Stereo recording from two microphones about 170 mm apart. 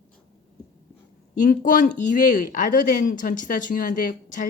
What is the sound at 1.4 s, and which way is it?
Speech, 50° left (ahead or behind).